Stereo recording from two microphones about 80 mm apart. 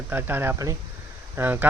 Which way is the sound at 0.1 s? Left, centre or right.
Right.